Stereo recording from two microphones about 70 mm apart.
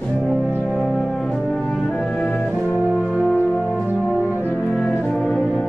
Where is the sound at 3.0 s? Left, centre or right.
Centre.